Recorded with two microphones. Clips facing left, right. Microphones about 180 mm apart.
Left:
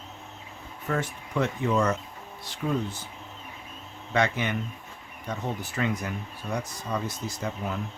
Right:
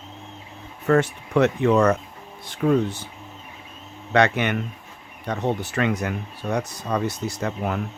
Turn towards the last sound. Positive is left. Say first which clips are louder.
# right 6 dB
turn(degrees=-70)  # may be behind; listen again after turning